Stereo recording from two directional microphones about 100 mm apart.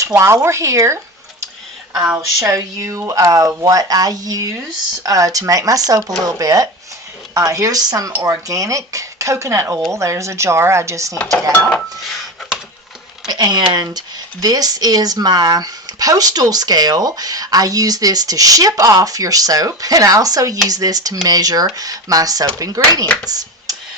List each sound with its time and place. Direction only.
0.2 s speech: 30° right (ahead or behind)
2.1 s speech: 35° right (ahead or behind)
13.2 s speech: 45° right (ahead or behind)
23.3 s a sound: 40° right (ahead or behind)